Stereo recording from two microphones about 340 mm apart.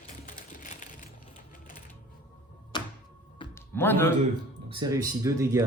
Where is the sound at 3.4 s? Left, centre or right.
Centre.